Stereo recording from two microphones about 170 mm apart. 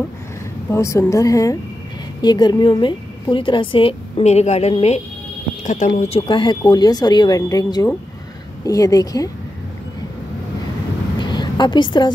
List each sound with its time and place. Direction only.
0.7 s a woman's voice: 15° left (ahead or behind); by 5.9 s 50° left (ahead or behind)
5.9 s speech: 35° left (ahead or behind); by 9.3 s 20° left (ahead or behind)
11.1 s a sound: 25° left (ahead or behind)